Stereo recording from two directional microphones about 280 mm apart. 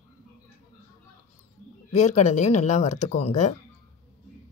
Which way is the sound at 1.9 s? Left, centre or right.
Left.